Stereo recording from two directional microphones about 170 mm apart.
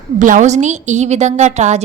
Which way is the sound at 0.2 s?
50° right (ahead or behind).